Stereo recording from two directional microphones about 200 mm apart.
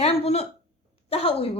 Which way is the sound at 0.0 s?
30° left (ahead or behind).